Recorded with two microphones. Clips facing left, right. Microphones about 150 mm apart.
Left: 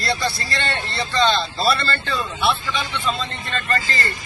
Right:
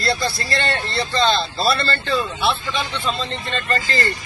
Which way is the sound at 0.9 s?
35° right (ahead or behind).